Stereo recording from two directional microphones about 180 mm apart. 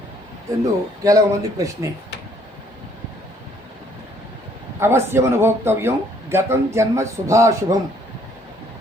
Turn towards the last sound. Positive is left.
turn(degrees=-15)  # may be behind; listen again after turning